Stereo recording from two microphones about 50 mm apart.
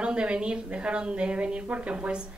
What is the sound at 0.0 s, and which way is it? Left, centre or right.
A woman's voice, right.